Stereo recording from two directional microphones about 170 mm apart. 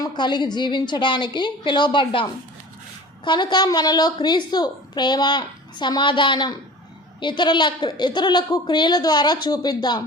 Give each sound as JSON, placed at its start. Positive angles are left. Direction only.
{"t": 0.0, "sound": "a woman's voice", "side_deg": 25}